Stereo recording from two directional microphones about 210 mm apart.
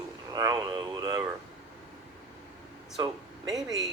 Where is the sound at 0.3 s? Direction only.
20° right (ahead or behind).